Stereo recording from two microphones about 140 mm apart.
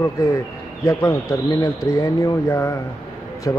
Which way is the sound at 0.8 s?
20° left (ahead or behind).